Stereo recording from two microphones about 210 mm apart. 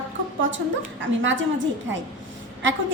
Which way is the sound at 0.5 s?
60° right (ahead or behind).